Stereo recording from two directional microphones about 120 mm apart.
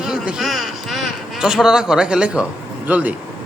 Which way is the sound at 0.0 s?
5° right (ahead or behind).